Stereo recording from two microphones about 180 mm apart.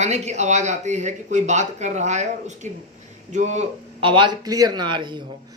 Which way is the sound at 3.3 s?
40° right (ahead or behind).